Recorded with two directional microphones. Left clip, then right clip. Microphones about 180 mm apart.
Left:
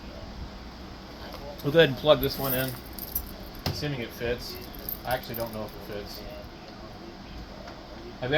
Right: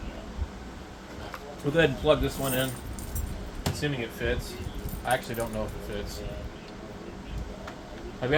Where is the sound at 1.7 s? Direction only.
65° left (ahead or behind).